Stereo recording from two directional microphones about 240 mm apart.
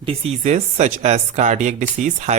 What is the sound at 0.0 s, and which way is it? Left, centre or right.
Speech, right.